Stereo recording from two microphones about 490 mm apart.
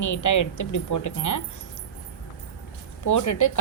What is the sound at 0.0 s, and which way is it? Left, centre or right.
A woman's voice, left.